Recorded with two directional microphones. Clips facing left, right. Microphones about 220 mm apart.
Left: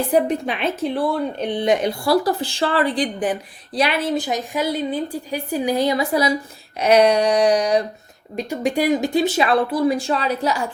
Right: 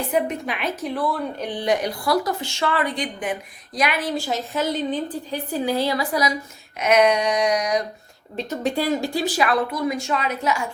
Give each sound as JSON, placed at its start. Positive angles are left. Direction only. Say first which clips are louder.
{"t": 0.1, "sound": "a woman's voice", "louder": "left 4 dB", "side_deg": 30}
{"t": 6.7, "sound": "a sound", "louder": "left 3 dB", "side_deg": 35}
{"t": 8.4, "sound": "speech", "louder": "left 3 dB", "side_deg": 15}